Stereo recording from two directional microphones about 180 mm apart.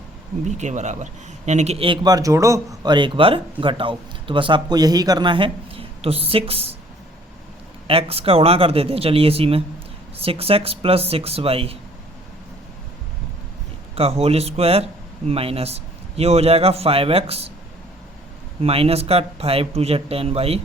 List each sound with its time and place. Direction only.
0.4 s a man's voice: 40° right (ahead or behind)
7.9 s a man's voice: 30° right (ahead or behind)
13.9 s a man's voice: 35° right (ahead or behind)
18.6 s a man's voice: 30° right (ahead or behind)